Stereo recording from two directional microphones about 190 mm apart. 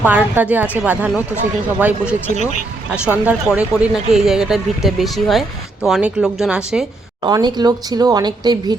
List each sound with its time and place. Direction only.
0.0 s a woman's voice: 10° right (ahead or behind)
7.2 s speech: 20° right (ahead or behind)